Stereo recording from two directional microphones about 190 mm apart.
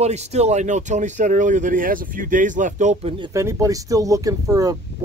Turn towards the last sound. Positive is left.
turn(degrees=-20)  # may be behind; listen again after turning